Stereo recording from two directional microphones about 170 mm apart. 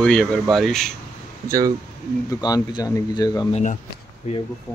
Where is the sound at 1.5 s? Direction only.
20° right (ahead or behind).